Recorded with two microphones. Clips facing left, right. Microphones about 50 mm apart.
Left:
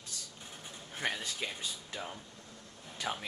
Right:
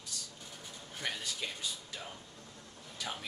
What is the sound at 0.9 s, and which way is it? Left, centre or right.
Speech, left.